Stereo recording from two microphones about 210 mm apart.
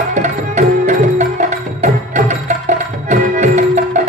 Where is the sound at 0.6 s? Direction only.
35° right (ahead or behind).